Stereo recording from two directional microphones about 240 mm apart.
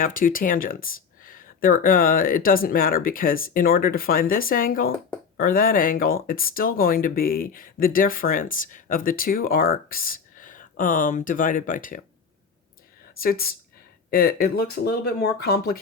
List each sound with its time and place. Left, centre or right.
0.0 s speech: left
13.1 s speech: left